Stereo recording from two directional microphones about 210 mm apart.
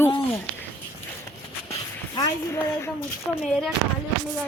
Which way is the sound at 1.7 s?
15° left (ahead or behind).